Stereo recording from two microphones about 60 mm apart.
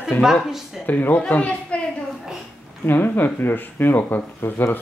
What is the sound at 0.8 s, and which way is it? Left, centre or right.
Speech, left.